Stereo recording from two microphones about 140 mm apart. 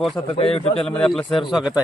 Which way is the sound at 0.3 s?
45° left (ahead or behind).